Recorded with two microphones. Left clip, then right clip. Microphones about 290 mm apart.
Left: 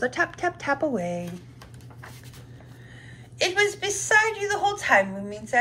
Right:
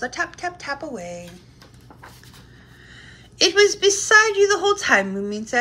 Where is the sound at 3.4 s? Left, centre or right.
Centre.